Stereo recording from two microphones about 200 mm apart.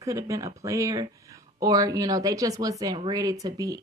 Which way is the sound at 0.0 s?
15° right (ahead or behind).